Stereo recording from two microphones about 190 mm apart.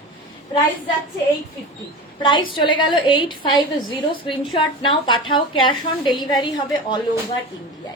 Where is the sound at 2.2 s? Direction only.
25° left (ahead or behind).